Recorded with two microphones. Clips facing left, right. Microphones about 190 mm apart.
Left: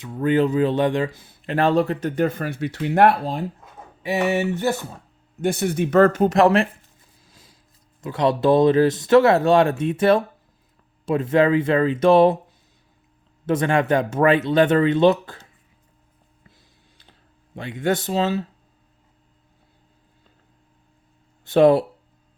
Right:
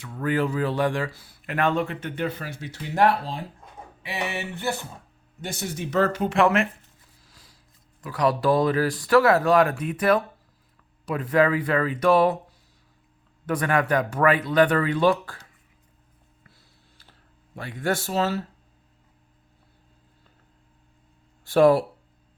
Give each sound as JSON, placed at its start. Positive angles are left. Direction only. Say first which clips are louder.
{"t": 0.0, "sound": "speech", "louder": "left 6 dB", "side_deg": 20}
{"t": 5.4, "sound": "speech", "louder": "left 10 dB", "side_deg": 60}
{"t": 7.3, "sound": "a sound", "louder": "left 4 dB", "side_deg": 25}
{"t": 8.0, "sound": "speech", "louder": "left 3 dB", "side_deg": 25}
{"t": 13.4, "sound": "speech", "louder": "left 4 dB", "side_deg": 25}
{"t": 17.0, "sound": "computer keyboard", "louder": "left 2 dB", "side_deg": 20}
{"t": 21.4, "sound": "speech", "louder": "left 3 dB", "side_deg": 20}